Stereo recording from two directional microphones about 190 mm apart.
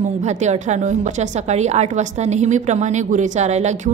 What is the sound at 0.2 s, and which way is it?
A woman's voice, 35° right (ahead or behind).